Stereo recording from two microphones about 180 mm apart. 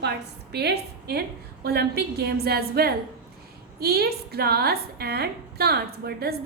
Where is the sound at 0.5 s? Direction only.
65° right (ahead or behind).